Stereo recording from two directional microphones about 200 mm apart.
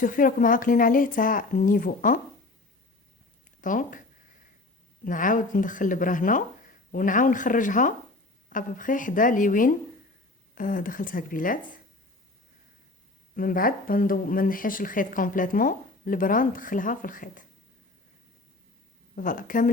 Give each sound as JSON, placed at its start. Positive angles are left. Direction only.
{"t": 0.0, "sound": "a woman's voice", "side_deg": 45}
{"t": 3.6, "sound": "speech", "side_deg": 40}
{"t": 5.0, "sound": "a woman's voice", "side_deg": 40}
{"t": 13.3, "sound": "a woman's voice", "side_deg": 45}
{"t": 19.1, "sound": "a woman's voice", "side_deg": 40}